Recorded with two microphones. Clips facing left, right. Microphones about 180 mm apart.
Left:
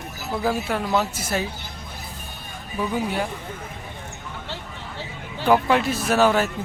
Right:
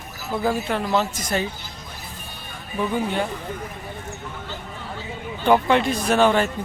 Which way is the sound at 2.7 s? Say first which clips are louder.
Right 1 dB; 5° left (ahead or behind).